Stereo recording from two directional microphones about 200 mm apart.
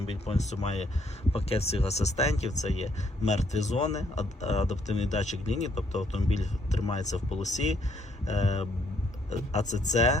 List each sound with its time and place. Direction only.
0.0 s speech: 30° left (ahead or behind)